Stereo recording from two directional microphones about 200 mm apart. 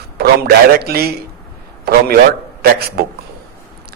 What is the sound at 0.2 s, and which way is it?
A man's voice, 50° right (ahead or behind).